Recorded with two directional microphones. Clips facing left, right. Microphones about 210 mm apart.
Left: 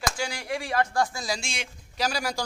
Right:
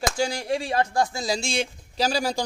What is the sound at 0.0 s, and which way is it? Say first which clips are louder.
Speech: right 6 dB; 25° right (ahead or behind).